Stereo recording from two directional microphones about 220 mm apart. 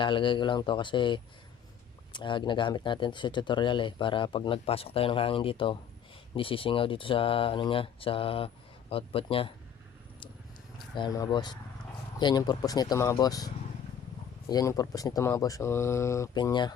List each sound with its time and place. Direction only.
0.0 s speech: 20° left (ahead or behind)
10.9 s speech: 20° left (ahead or behind)